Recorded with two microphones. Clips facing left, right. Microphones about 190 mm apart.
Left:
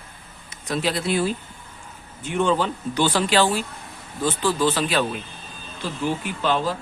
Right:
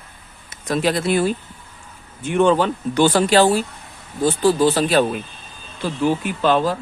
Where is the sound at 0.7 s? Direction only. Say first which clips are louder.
Right 5 dB; 55° right (ahead or behind).